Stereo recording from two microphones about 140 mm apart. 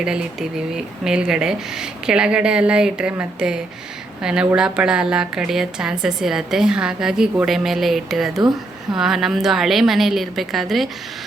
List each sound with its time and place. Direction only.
0.0 s a woman's voice: 5° right (ahead or behind)
8.4 s speech: 30° right (ahead or behind)
9.0 s a woman's voice: centre (ahead or behind)